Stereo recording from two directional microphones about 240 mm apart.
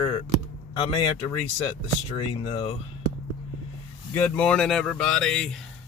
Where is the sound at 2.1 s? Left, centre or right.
Left.